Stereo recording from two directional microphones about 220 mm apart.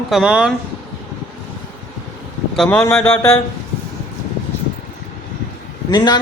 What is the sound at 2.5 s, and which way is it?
Speech, centre (ahead or behind).